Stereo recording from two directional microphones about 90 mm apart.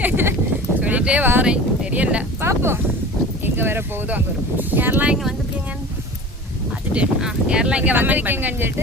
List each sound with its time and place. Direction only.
0.0 s sheep: 25° right (ahead or behind)
0.8 s a sound: 15° right (ahead or behind)
1.5 s wind noise: 15° right (ahead or behind)
2.4 s a sound: 30° right (ahead or behind)
3.4 s speech: 25° right (ahead or behind)
6.9 s speech: 10° right (ahead or behind)